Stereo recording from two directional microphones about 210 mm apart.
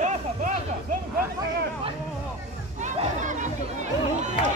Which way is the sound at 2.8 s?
35° right (ahead or behind).